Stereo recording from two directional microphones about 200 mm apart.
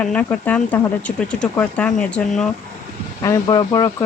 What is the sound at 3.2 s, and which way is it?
Speech, 15° left (ahead or behind).